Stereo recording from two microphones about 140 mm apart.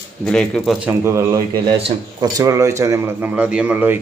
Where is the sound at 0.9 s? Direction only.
20° right (ahead or behind).